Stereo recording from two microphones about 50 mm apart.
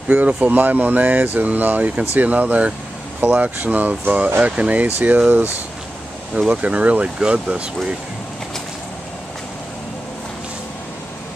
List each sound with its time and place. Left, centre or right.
0.1 s speech: right
4.8 s speech: right
6.6 s speech: right